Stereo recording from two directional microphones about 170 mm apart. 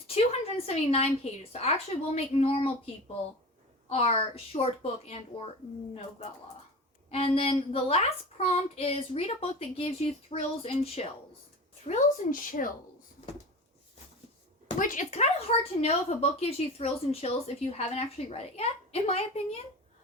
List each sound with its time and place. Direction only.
0.1 s speech: 35° left (ahead or behind)
7.1 s speech: 35° left (ahead or behind)
11.9 s speech: 50° left (ahead or behind)
14.8 s speech: 50° left (ahead or behind)